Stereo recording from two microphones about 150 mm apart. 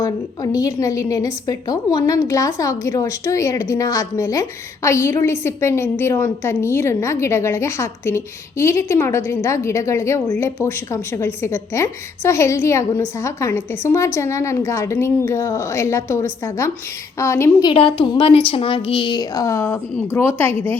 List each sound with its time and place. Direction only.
0.0 s a woman's voice: 20° left (ahead or behind)
17.7 s a woman's voice: 35° left (ahead or behind); by 20.7 s 15° left (ahead or behind)